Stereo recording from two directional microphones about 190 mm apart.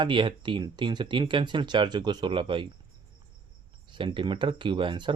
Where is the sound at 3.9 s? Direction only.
25° right (ahead or behind).